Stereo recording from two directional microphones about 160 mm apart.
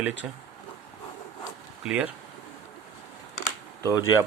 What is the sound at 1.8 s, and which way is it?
Speech, 10° right (ahead or behind).